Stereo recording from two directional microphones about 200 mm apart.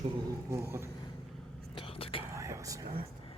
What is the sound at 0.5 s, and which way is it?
Dog, 15° right (ahead or behind).